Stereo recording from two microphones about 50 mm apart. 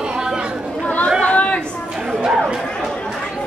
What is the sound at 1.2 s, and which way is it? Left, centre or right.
Chatter, left.